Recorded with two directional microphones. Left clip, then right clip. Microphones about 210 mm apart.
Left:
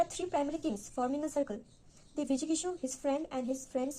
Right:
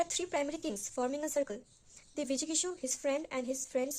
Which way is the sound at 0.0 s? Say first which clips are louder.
Left 1 dB; 30° right (ahead or behind).